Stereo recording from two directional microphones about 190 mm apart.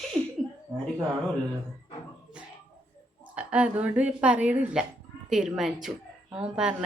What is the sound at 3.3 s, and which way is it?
A woman's voice, 5° right (ahead or behind).